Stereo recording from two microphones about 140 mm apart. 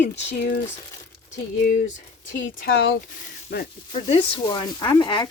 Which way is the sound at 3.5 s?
90° left.